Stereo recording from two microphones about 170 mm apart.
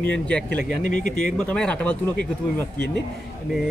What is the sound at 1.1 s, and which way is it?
Speech, 5° left (ahead or behind).